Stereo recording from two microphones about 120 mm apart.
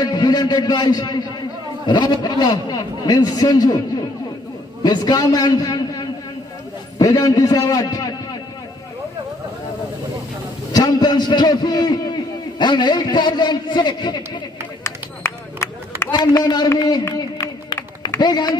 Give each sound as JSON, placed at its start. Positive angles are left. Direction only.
{"t": 0.0, "sound": "a man's voice", "side_deg": 35}
{"t": 4.8, "sound": "a man's voice", "side_deg": 30}
{"t": 10.7, "sound": "a man's voice", "side_deg": 35}
{"t": 14.8, "sound": "a sound", "side_deg": 20}
{"t": 16.4, "sound": "a man's voice", "side_deg": 35}
{"t": 18.2, "sound": "a man's voice", "side_deg": 35}